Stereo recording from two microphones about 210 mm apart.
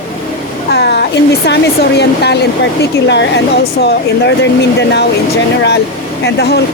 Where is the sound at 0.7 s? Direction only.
50° left (ahead or behind).